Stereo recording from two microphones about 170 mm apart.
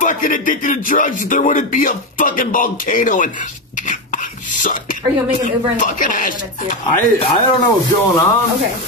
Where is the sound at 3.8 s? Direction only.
50° left (ahead or behind).